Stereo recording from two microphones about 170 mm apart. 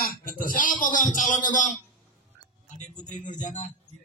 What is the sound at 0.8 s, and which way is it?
Speech, 50° left (ahead or behind).